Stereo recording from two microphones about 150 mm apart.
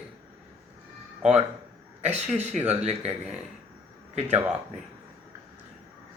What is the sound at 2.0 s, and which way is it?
Speech, 45° right (ahead or behind).